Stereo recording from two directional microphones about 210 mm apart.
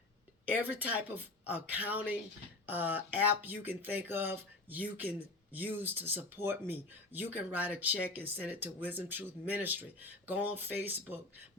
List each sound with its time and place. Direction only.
0.5 s speech: 10° right (ahead or behind)